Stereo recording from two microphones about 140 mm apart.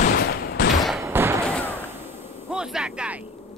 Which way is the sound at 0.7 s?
Centre (ahead or behind).